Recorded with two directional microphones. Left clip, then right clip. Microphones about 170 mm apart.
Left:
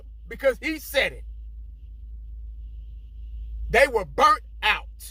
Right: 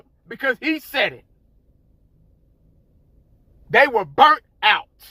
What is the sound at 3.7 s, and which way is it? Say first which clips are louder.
Speech: right 5 dB; 25° left (ahead or behind).